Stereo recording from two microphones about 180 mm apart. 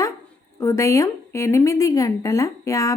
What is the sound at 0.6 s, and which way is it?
A woman's voice, 15° left (ahead or behind).